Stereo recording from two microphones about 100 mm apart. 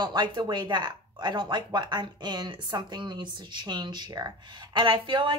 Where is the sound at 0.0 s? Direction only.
50° right (ahead or behind).